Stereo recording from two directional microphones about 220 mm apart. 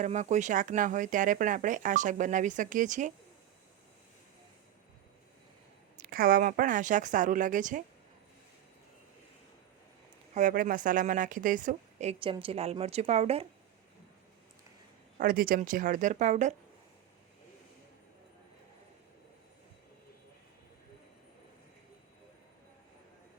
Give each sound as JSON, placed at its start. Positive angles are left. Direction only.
{"t": 0.0, "sound": "a woman's voice", "side_deg": -35}
{"t": 6.0, "sound": "a woman's voice", "side_deg": -40}
{"t": 10.3, "sound": "a woman's voice", "side_deg": -35}
{"t": 15.2, "sound": "a woman's voice", "side_deg": -40}